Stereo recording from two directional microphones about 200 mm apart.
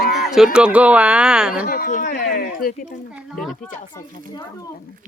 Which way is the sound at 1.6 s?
45° left (ahead or behind).